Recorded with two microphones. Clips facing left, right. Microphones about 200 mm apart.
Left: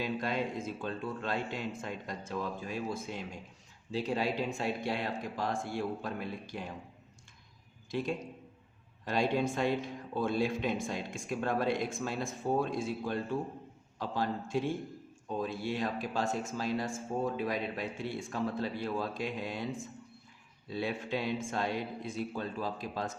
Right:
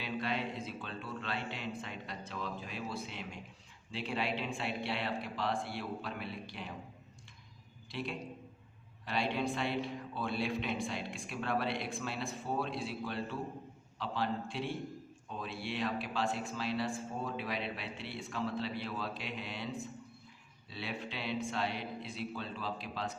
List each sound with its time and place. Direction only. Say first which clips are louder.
0.0 s a man's voice: left 4 dB; 45° left (ahead or behind)
7.9 s a man's voice: left 6 dB; 45° left (ahead or behind)